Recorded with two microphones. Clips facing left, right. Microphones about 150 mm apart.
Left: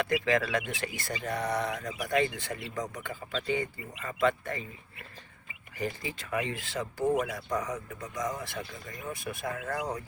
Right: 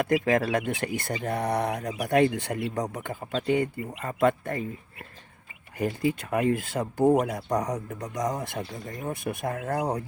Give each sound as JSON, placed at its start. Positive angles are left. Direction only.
{"t": 0.0, "sound": "speech", "side_deg": -50}
{"t": 1.7, "sound": "speech", "side_deg": -35}
{"t": 2.0, "sound": "speech", "side_deg": -60}
{"t": 5.7, "sound": "speech", "side_deg": -55}
{"t": 7.0, "sound": "speech", "side_deg": -35}
{"t": 9.6, "sound": "speech", "side_deg": -35}